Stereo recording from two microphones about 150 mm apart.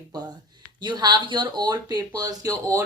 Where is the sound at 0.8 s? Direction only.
30° right (ahead or behind).